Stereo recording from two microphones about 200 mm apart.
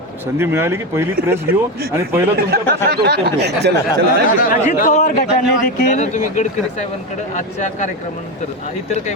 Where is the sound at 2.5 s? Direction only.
55° right (ahead or behind).